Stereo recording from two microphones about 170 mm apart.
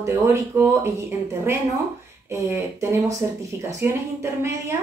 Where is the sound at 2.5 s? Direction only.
15° right (ahead or behind).